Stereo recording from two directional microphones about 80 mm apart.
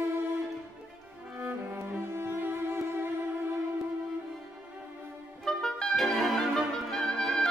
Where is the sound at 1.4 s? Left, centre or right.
Right.